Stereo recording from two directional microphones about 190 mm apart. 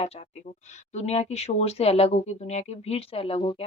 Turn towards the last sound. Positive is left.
turn(degrees=30)  # may be behind; listen again after turning